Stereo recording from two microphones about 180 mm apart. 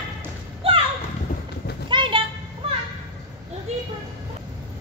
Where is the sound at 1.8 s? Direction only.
25° right (ahead or behind).